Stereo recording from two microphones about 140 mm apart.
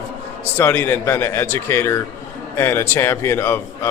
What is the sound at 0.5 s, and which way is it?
A man's voice, 15° left (ahead or behind).